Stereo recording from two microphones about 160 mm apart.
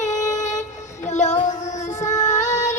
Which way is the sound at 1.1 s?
45° left (ahead or behind).